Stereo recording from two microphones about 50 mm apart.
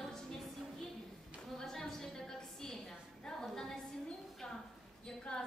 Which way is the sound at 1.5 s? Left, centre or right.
Centre.